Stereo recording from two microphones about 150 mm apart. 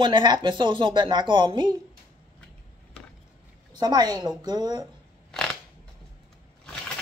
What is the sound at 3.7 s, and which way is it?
A woman's voice, 25° right (ahead or behind).